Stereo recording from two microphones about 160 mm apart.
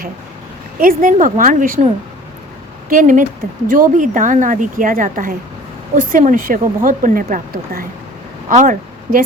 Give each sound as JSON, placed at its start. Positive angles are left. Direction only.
{"t": 0.8, "sound": "speech", "side_deg": -60}
{"t": 2.9, "sound": "speech", "side_deg": -55}
{"t": 8.4, "sound": "speech", "side_deg": -55}